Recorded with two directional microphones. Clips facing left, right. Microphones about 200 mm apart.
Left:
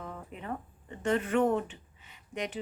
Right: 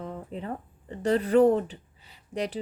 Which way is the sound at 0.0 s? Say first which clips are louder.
Right 6 dB; 30° right (ahead or behind).